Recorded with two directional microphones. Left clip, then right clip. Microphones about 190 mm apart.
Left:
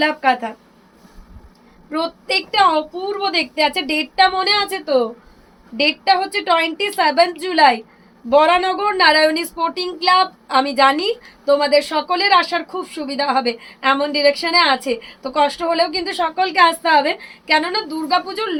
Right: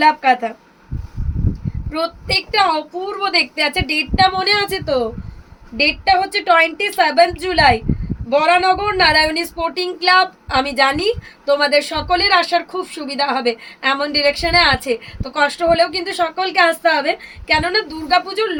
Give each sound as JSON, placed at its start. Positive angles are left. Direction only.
{"t": 0.0, "sound": "speech", "side_deg": -15}
{"t": 1.9, "sound": "speech", "side_deg": -15}